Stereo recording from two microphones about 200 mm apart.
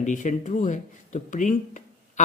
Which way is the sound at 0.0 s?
40° left (ahead or behind).